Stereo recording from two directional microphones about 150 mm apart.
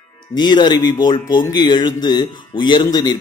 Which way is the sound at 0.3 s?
30° left (ahead or behind).